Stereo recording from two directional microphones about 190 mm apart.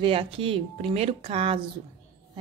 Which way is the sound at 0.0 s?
30° right (ahead or behind).